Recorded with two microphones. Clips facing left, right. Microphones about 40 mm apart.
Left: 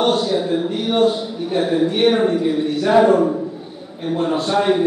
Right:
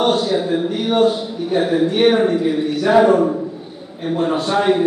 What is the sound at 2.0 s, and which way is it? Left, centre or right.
A man's voice, right.